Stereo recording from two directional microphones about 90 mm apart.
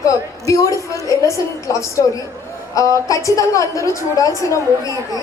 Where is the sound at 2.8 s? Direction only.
40° left (ahead or behind).